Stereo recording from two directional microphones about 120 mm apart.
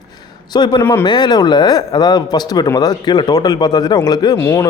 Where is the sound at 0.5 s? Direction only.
40° left (ahead or behind).